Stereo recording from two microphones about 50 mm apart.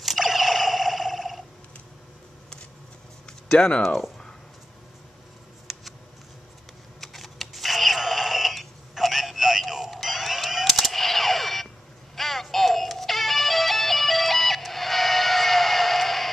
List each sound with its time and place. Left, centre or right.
0.0 s camera: centre
3.3 s a sound: centre
3.8 s speech: centre
5.7 s scissors: centre
7.0 s a sound: centre
12.2 s music: centre